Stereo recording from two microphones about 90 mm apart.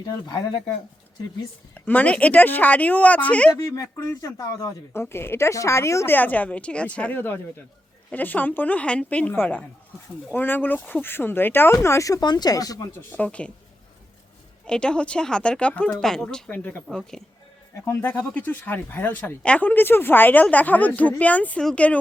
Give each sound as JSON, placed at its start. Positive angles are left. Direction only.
{"t": 0.0, "sound": "speech", "side_deg": 55}
{"t": 1.7, "sound": "speech", "side_deg": 15}
{"t": 3.6, "sound": "a woman's voice", "side_deg": 35}
{"t": 4.9, "sound": "a woman's voice", "side_deg": 25}
{"t": 6.1, "sound": "speech", "side_deg": 20}
{"t": 9.3, "sound": "speech", "side_deg": 25}
{"t": 12.2, "sound": "speech", "side_deg": 50}
{"t": 13.0, "sound": "speech", "side_deg": 20}
{"t": 14.7, "sound": "speech", "side_deg": 10}
{"t": 16.5, "sound": "speech", "side_deg": 20}
{"t": 17.8, "sound": "speech", "side_deg": 25}